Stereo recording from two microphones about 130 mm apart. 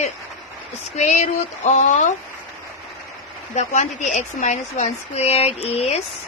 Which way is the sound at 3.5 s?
65° left (ahead or behind).